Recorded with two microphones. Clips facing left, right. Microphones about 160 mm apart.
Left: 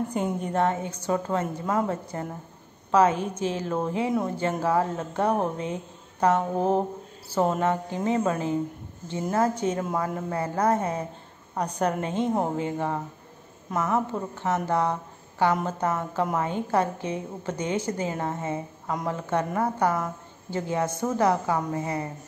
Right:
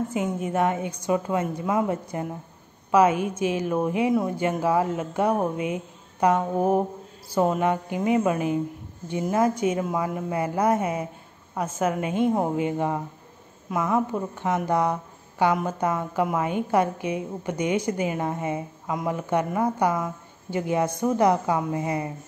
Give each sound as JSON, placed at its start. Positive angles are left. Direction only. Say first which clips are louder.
{"t": 0.1, "sound": "a woman's voice", "louder": "right 1 dB", "side_deg": -5}
{"t": 7.6, "sound": "a woman's voice", "louder": "right 2 dB", "side_deg": -15}
{"t": 12.5, "sound": "a woman's voice", "louder": "right 3 dB", "side_deg": -15}